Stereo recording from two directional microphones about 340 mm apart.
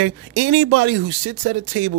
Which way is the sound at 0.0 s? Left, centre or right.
Right.